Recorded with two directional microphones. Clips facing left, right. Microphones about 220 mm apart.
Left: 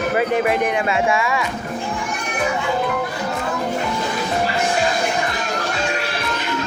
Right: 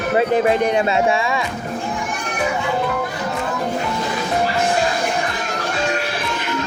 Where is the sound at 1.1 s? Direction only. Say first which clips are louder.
Even; 30° right (ahead or behind).